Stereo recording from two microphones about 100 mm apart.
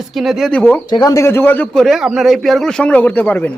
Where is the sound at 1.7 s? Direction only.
5° left (ahead or behind).